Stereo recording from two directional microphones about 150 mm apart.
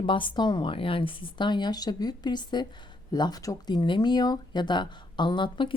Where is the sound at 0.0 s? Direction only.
35° left (ahead or behind).